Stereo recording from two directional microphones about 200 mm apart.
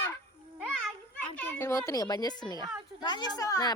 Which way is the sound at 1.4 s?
10° left (ahead or behind).